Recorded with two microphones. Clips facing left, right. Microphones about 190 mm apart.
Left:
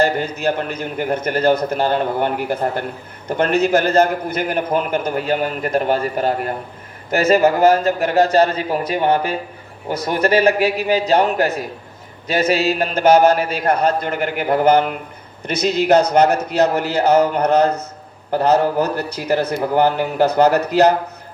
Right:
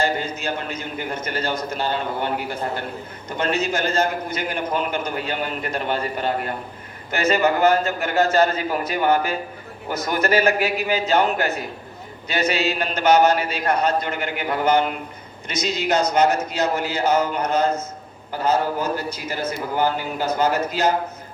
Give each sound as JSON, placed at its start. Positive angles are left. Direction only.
{"t": 0.0, "sound": "a man's voice", "side_deg": 60}
{"t": 5.0, "sound": "a man's voice", "side_deg": 45}
{"t": 12.5, "sound": "a man's voice", "side_deg": 35}
{"t": 13.7, "sound": "a man's voice", "side_deg": 55}
{"t": 14.1, "sound": "a man's voice", "side_deg": 45}